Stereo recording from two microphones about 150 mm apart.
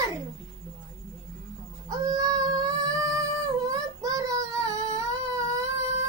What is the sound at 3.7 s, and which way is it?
Child singing, 25° right (ahead or behind).